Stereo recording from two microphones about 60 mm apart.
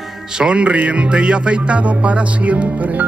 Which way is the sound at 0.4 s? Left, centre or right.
Centre.